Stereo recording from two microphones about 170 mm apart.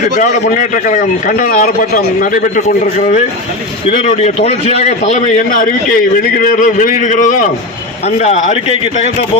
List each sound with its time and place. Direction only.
0.2 s a man's voice: 50° left (ahead or behind)
4.0 s a man's voice: 40° left (ahead or behind)